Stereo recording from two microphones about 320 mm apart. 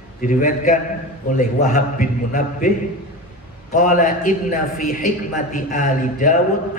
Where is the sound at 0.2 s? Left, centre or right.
Left.